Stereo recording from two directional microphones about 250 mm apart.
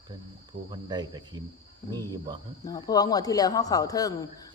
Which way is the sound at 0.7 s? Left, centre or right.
Centre.